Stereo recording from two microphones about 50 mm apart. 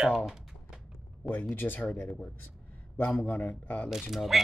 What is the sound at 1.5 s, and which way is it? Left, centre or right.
Speech, left.